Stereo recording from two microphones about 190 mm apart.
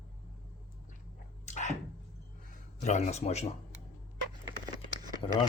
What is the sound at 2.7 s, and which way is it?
Speech, 35° left (ahead or behind).